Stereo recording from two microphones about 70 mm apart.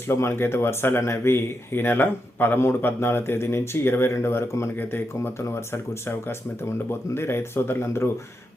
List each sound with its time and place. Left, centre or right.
0.1 s speech: left